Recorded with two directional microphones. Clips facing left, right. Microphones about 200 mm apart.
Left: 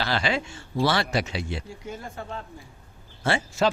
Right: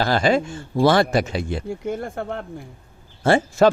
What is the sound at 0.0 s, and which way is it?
Speech, 45° right (ahead or behind).